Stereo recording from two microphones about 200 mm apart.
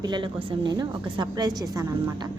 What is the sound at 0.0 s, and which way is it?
A woman's voice, 25° right (ahead or behind).